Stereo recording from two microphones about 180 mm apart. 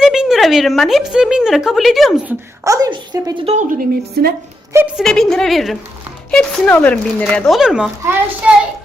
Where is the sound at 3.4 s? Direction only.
45° right (ahead or behind).